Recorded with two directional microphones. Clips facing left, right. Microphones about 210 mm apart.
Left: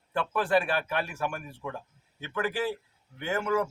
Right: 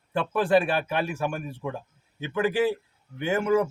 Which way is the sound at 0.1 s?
25° right (ahead or behind).